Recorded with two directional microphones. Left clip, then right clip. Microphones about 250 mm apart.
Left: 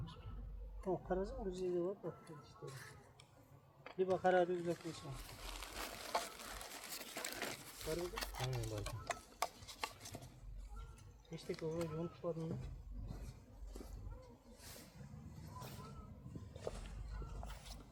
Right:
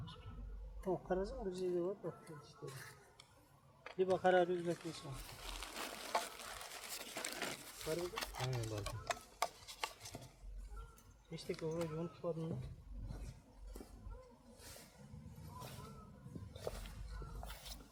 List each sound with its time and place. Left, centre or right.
0.8 s speech: centre
3.8 s a sound: centre
9.1 s stir: centre
11.3 s speech: centre
11.5 s speech: centre
15.5 s vehicle: centre
16.6 s a sound: centre
17.4 s dog: centre